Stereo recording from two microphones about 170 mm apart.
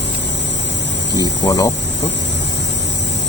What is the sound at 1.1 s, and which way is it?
Speech, 25° left (ahead or behind).